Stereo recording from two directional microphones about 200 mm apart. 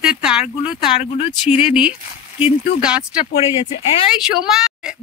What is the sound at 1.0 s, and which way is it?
Speech, 30° left (ahead or behind).